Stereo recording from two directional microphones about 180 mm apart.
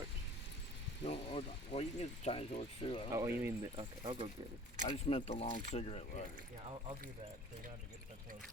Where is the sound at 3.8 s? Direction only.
30° right (ahead or behind).